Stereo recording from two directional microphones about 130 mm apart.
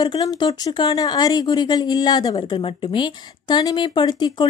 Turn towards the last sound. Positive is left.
turn(degrees=35)  # may be behind; listen again after turning